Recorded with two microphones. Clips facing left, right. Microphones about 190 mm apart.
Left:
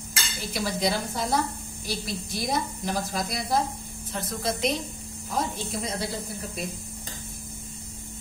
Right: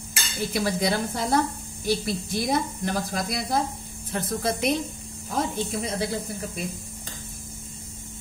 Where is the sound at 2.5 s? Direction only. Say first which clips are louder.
Right 2 dB; 60° right (ahead or behind).